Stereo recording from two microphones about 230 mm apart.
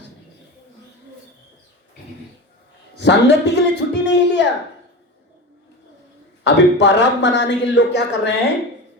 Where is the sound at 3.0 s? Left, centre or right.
Left.